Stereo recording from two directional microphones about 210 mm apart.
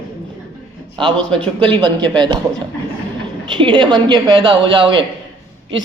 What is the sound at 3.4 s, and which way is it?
A man's voice, 20° right (ahead or behind).